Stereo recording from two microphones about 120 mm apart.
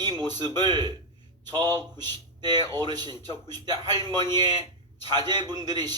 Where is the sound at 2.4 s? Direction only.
35° right (ahead or behind).